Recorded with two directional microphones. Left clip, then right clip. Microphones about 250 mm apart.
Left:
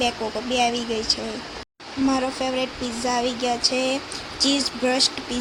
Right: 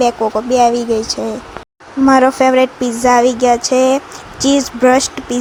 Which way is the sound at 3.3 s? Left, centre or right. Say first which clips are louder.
Right 11 dB; right.